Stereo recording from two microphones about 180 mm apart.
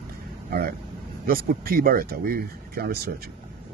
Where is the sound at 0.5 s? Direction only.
55° right (ahead or behind).